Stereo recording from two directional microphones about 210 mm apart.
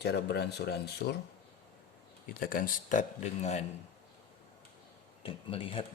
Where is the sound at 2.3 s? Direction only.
45° left (ahead or behind).